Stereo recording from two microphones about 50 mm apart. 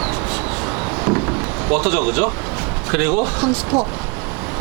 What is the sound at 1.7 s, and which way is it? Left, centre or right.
Speech, centre.